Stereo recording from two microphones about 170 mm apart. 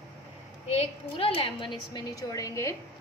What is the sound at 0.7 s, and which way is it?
A woman's voice, 35° left (ahead or behind).